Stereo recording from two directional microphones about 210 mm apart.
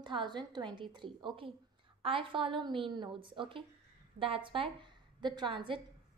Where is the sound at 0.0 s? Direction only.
20° right (ahead or behind).